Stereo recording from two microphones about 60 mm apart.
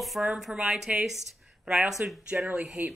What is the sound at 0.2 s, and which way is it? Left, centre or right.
A woman's voice, centre.